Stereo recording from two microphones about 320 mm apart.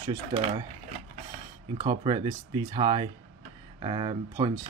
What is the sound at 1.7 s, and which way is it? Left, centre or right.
Speech, centre.